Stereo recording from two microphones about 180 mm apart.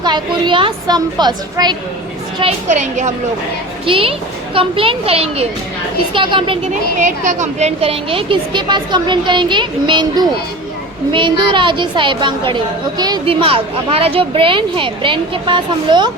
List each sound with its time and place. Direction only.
0.0 s a woman's voice: 25° right (ahead or behind)
2.4 s a child's voice: 40° right (ahead or behind)
3.8 s a woman's voice: 30° right (ahead or behind)
7.0 s a woman's voice: 45° right (ahead or behind); by 16.1 s 25° right (ahead or behind)